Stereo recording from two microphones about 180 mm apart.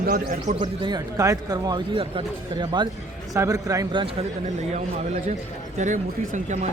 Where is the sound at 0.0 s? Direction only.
50° right (ahead or behind).